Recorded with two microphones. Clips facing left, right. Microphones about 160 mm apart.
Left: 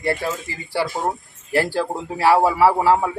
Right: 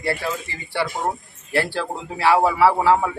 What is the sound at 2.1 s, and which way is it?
Speech, 40° left (ahead or behind).